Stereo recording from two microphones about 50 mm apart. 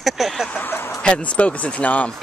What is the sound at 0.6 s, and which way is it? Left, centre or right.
Speech, left.